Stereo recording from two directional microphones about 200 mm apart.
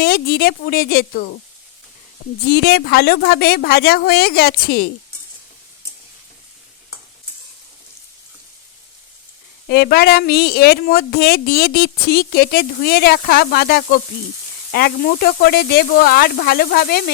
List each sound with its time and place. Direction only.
0.0 s speech: 50° left (ahead or behind)
2.5 s speech: 55° left (ahead or behind)
9.6 s speech: 50° left (ahead or behind)